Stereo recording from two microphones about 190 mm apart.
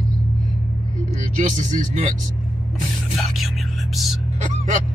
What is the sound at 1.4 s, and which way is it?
Speech, 40° right (ahead or behind).